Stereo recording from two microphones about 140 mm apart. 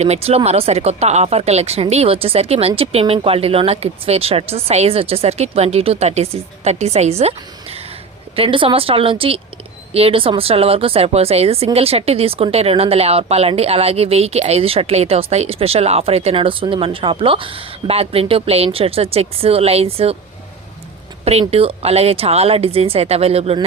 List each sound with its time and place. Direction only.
0.0 s speech: 50° right (ahead or behind)
21.2 s speech: 45° right (ahead or behind)